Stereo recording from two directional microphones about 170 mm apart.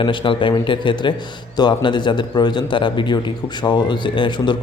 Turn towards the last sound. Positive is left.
turn(degrees=25)  # may be behind; listen again after turning